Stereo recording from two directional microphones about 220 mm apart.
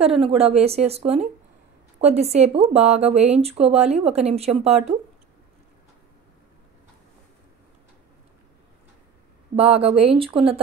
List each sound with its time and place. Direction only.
0.2 s speech: 25° right (ahead or behind)
9.6 s speech: 25° right (ahead or behind)